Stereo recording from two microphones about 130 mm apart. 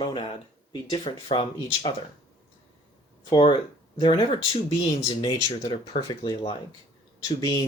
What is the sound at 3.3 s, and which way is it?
Speech, 40° left (ahead or behind).